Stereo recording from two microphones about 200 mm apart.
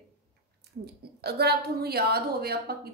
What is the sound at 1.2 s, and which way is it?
Speech, 55° right (ahead or behind).